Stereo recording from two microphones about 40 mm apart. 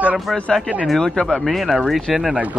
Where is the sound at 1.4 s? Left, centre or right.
Centre.